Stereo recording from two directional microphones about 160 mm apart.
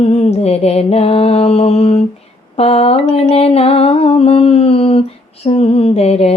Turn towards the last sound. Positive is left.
turn(degrees=40)  # may be behind; listen again after turning